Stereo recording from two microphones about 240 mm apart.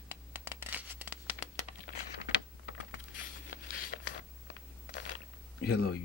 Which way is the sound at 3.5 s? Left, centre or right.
Left.